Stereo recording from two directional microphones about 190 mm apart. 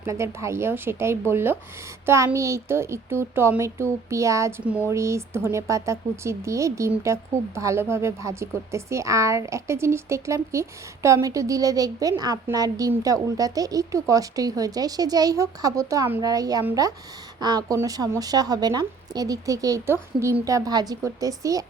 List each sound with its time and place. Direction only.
0.0 s speech: 15° right (ahead or behind)